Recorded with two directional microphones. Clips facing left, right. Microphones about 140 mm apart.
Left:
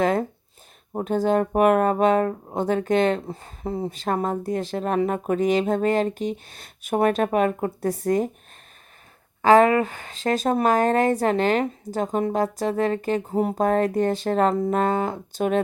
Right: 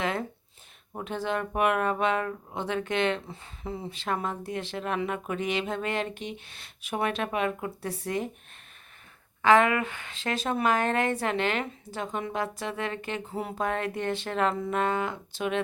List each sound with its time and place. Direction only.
0.0 s speech: 40° left (ahead or behind)
9.4 s speech: 35° left (ahead or behind)